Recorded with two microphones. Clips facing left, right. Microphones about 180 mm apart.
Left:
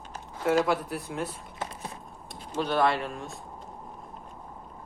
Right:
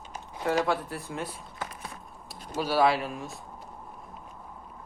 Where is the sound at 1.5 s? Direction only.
25° left (ahead or behind).